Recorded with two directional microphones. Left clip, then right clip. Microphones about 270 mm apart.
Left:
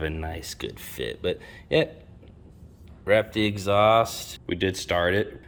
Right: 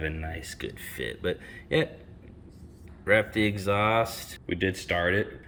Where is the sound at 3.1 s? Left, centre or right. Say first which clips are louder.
Left 2 dB; centre.